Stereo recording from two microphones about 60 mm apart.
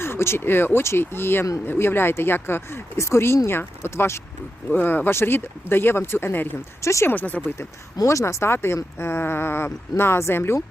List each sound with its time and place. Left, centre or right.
0.0 s speech: left
4.7 s speech: left
6.8 s speech: left
7.1 s speech: left
8.0 s speech: left